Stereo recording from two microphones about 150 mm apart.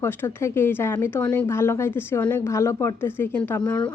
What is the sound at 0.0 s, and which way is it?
A woman's voice, 15° left (ahead or behind).